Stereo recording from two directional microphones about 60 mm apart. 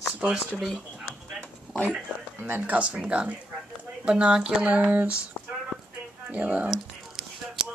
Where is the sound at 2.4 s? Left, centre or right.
Right; by 4.7 s centre.